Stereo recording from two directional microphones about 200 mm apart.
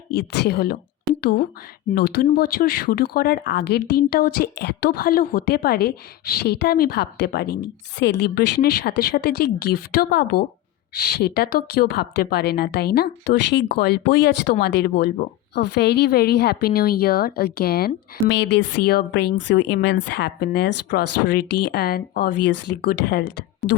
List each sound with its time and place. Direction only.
0.1 s a woman's voice: 50° left (ahead or behind)
3.4 s a woman's voice: 60° left (ahead or behind)